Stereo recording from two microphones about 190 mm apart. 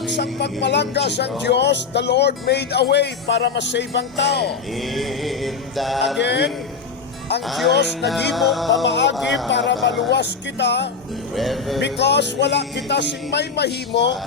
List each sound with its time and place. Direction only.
0.1 s speech: 60° left (ahead or behind)
4.4 s male singing: centre (ahead or behind)
6.1 s speech: 65° left (ahead or behind)
7.4 s music: centre (ahead or behind)
8.8 s speech: 70° left (ahead or behind)
9.1 s music: centre (ahead or behind)
9.5 s speech: 70° left (ahead or behind)
11.3 s music: centre (ahead or behind)
11.9 s speech: 65° left (ahead or behind)